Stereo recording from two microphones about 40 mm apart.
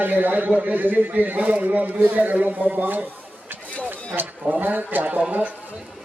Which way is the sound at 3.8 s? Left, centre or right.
Right.